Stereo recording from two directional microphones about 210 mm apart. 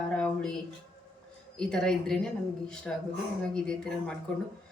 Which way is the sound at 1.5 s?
5° left (ahead or behind).